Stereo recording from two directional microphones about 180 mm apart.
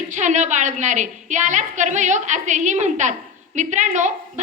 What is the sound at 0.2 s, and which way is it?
A woman's voice, 40° right (ahead or behind).